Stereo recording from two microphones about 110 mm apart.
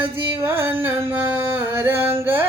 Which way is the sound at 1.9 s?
60° right (ahead or behind).